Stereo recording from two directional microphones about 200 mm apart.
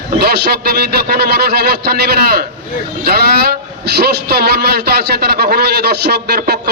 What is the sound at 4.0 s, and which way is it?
A man's voice, 50° right (ahead or behind).